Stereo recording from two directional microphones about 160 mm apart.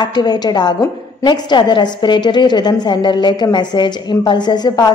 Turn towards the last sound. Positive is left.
turn(degrees=25)  # may be behind; listen again after turning